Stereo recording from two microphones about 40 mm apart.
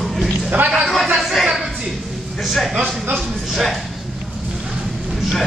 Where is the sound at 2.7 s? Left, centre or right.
Right.